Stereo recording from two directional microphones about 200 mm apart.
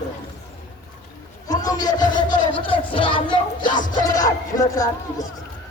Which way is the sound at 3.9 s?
15° left (ahead or behind).